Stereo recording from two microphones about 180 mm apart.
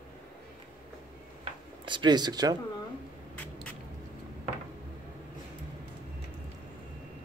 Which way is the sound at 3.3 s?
5° left (ahead or behind).